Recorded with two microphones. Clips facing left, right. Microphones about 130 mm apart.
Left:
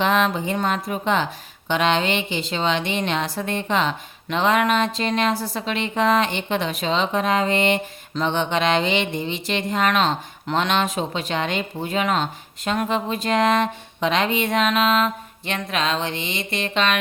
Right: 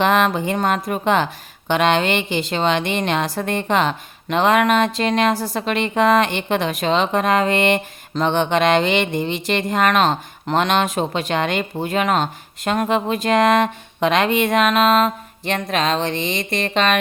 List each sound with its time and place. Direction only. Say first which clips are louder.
0.0 s speech: right 3 dB; 60° right (ahead or behind)